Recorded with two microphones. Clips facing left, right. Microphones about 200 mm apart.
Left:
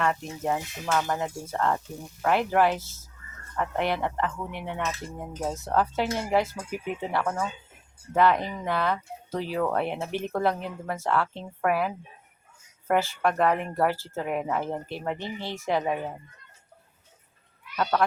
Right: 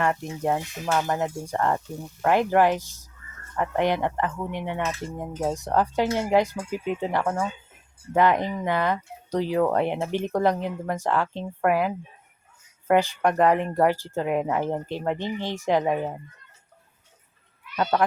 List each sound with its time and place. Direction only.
0.0 s speech: 15° right (ahead or behind)